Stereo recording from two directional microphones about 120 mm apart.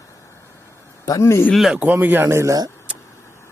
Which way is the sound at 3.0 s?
25° left (ahead or behind).